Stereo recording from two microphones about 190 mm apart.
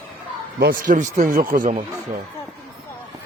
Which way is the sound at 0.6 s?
45° right (ahead or behind).